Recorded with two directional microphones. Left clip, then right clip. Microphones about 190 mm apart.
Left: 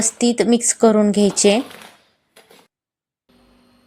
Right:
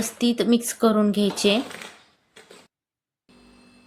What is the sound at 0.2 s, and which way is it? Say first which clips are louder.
A woman's voice: left 4 dB; 25° left (ahead or behind).